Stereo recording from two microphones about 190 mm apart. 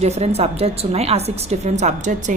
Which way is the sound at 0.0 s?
35° right (ahead or behind).